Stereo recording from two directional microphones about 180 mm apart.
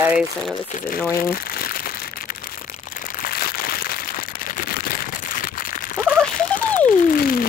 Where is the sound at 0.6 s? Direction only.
50° left (ahead or behind).